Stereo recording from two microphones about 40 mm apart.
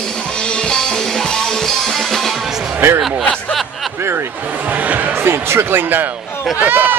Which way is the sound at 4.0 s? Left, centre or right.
Right.